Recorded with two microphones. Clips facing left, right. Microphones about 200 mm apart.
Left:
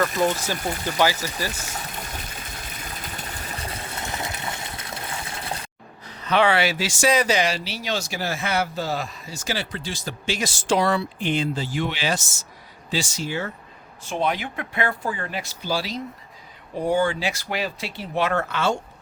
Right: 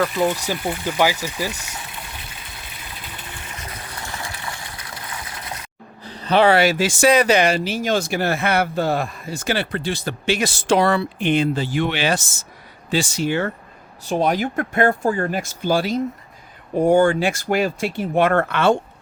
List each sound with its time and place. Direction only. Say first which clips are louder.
0.4 s speech: right 3 dB; 15° right (ahead or behind)
1.5 s a sound: left 2 dB; 40° left (ahead or behind)
6.0 s speech: right 4 dB; 30° right (ahead or behind); by 13.5 s 65° right (ahead or behind)
14.1 s speech: right 5 dB; 40° right (ahead or behind); by 18.8 s 60° right (ahead or behind)